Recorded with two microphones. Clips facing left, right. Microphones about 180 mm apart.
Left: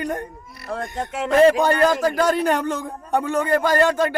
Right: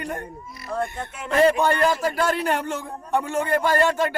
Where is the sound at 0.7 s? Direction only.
80° left.